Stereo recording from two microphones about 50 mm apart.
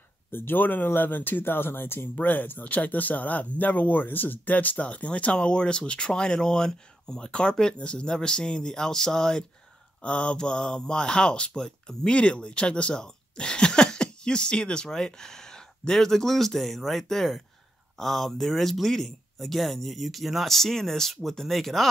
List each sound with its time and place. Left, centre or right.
0.3 s speech: left
2.1 s speech: left; by 21.8 s centre